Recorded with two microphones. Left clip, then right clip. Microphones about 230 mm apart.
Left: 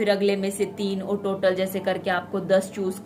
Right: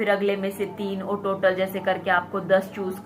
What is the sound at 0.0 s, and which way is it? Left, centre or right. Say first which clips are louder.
A woman's voice: left 1 dB; left.